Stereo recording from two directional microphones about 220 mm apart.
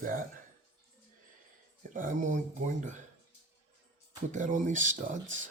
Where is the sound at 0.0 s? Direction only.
40° right (ahead or behind).